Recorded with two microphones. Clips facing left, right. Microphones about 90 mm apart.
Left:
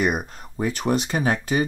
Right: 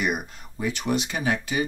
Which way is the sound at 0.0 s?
40° left (ahead or behind).